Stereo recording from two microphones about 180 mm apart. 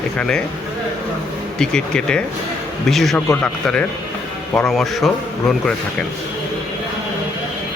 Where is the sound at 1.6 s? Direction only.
5° left (ahead or behind).